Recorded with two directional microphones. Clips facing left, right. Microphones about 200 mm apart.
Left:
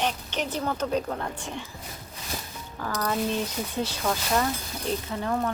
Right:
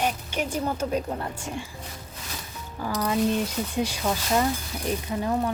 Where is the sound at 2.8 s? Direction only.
10° right (ahead or behind).